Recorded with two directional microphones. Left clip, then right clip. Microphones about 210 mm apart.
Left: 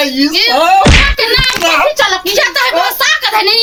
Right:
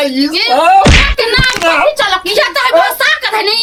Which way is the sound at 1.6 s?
15° right (ahead or behind).